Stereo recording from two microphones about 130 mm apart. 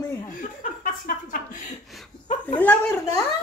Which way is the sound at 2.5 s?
15° left (ahead or behind).